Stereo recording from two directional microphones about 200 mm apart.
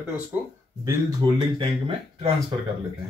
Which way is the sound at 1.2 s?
25° right (ahead or behind).